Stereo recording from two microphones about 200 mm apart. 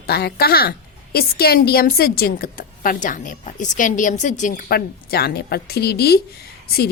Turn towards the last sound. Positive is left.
turn(degrees=50)  # may be behind; listen again after turning